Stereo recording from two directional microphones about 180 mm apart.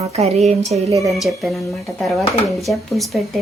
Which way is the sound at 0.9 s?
20° right (ahead or behind).